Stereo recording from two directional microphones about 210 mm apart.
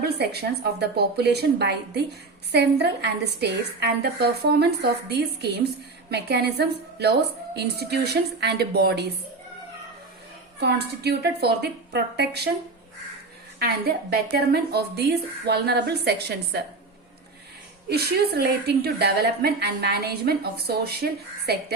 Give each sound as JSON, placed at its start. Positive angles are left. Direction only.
{"t": 0.0, "sound": "a woman's voice", "side_deg": -50}
{"t": 10.6, "sound": "a woman's voice", "side_deg": -50}
{"t": 13.6, "sound": "a woman's voice", "side_deg": -50}
{"t": 17.8, "sound": "a woman's voice", "side_deg": -50}